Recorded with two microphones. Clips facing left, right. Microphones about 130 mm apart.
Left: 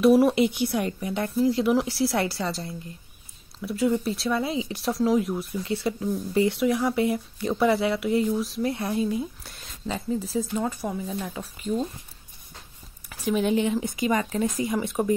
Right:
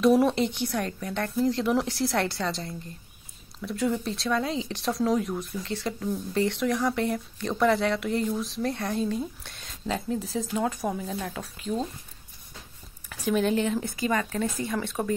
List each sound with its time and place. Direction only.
0.0 s a woman's voice: 5° left (ahead or behind)
13.3 s speech: 5° left (ahead or behind)
13.9 s a woman's voice: 20° left (ahead or behind)